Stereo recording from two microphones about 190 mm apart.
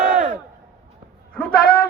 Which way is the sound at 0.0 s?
40° right (ahead or behind).